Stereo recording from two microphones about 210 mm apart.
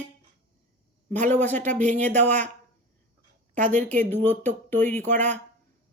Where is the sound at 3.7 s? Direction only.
10° left (ahead or behind).